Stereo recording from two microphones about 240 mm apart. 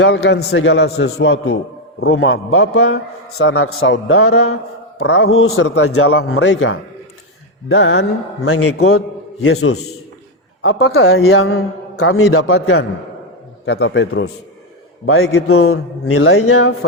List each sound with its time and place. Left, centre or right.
0.0 s a man's voice: left
8.4 s a man's voice: left
10.6 s a man's voice: left
13.7 s a man's voice: left